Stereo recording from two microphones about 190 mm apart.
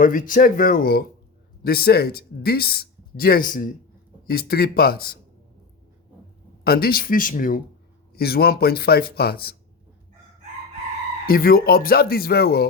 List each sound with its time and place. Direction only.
0.0 s speech: 45° left (ahead or behind)
6.7 s speech: 55° left (ahead or behind)
11.3 s speech: 50° left (ahead or behind)